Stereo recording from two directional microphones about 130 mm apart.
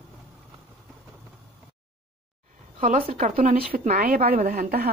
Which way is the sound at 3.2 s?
90° right.